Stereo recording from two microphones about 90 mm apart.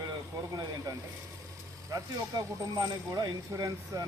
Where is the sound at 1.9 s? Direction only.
40° right (ahead or behind).